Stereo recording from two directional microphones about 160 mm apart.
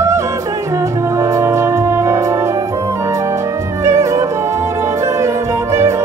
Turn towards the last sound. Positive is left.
turn(degrees=-15)  # may be behind; listen again after turning